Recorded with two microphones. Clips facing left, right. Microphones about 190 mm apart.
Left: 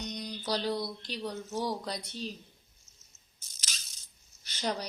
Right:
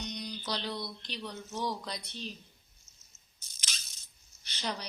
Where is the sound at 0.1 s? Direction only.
45° left (ahead or behind).